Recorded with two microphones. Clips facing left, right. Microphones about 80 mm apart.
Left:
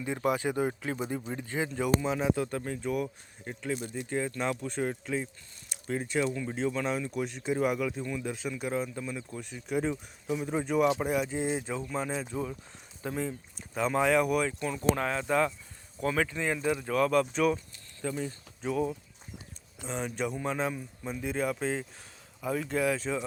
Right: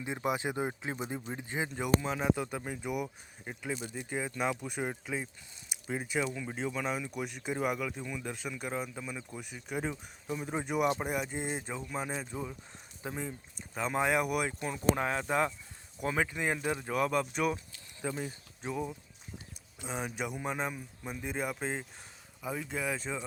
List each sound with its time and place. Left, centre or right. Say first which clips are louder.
0.0 s speech: left 4 dB; centre
10.5 s speech: left 4 dB; centre
13.7 s speech: left 4 dB; centre
14.9 s speech: left 2 dB; right; by 23.2 s centre